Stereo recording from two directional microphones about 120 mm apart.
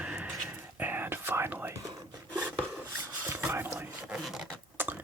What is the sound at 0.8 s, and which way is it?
Whispering, 15° right (ahead or behind).